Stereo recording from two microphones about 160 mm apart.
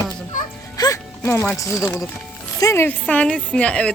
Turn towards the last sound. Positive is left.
turn(degrees=5)  # may be behind; listen again after turning